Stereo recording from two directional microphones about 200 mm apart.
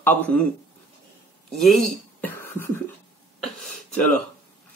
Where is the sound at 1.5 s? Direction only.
Centre (ahead or behind).